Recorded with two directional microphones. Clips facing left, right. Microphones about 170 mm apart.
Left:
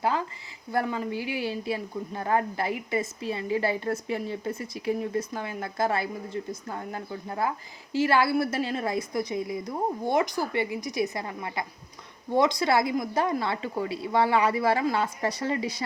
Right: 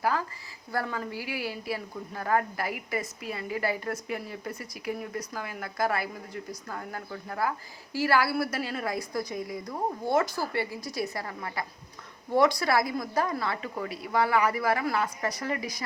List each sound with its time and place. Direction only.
0.0 s speech: 25° left (ahead or behind)